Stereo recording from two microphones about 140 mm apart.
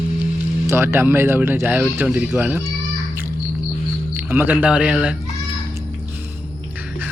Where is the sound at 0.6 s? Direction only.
15° right (ahead or behind).